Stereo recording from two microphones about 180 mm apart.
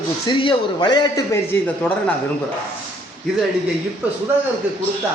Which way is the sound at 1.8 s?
10° left (ahead or behind).